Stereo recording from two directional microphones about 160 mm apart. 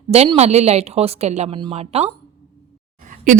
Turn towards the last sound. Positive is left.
turn(degrees=-55)  # may be behind; listen again after turning